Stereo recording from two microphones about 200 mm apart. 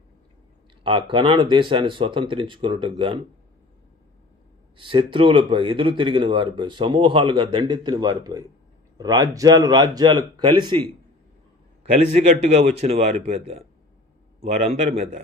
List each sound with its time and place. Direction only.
0.8 s speech: 25° right (ahead or behind)
4.7 s speech: 25° right (ahead or behind)
12.1 s a man's voice: 35° right (ahead or behind)